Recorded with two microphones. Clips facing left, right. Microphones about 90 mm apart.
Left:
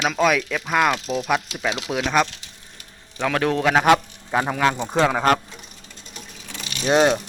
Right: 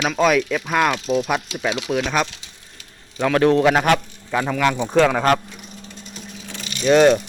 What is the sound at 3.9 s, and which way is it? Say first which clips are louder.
Speech: left 2 dB; 20° left (ahead or behind).